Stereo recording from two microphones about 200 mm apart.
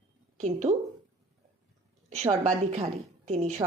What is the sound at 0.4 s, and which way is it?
Speech, 35° right (ahead or behind).